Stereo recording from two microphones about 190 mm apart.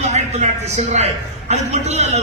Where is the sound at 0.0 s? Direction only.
35° right (ahead or behind).